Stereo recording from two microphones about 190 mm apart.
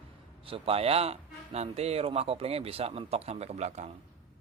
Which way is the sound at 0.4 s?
30° right (ahead or behind).